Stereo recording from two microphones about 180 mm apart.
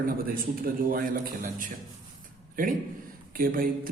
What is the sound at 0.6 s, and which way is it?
A man's voice, 50° right (ahead or behind).